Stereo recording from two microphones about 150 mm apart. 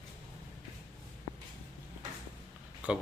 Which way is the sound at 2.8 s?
10° right (ahead or behind).